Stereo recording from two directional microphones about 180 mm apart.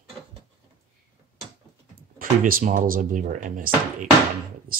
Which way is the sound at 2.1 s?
50° right (ahead or behind).